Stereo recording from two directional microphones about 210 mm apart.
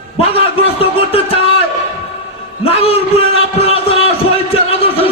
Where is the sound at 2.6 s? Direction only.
30° left (ahead or behind).